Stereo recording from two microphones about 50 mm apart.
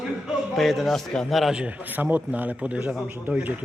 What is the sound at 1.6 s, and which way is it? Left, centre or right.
A man's voice, right.